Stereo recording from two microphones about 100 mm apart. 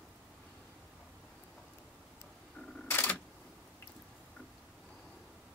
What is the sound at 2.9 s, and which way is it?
Camera, 15° left (ahead or behind).